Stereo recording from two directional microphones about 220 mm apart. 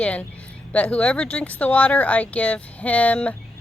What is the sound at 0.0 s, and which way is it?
Speech, 5° left (ahead or behind).